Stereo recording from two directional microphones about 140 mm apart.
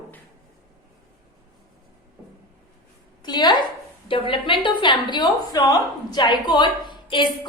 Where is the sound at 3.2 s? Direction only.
30° left (ahead or behind).